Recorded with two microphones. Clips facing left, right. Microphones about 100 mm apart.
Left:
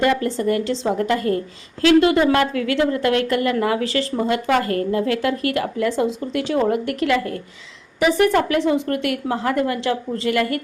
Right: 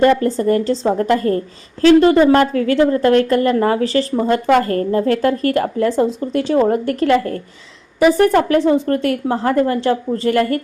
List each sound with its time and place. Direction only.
0.0 s a woman's voice: 35° right (ahead or behind)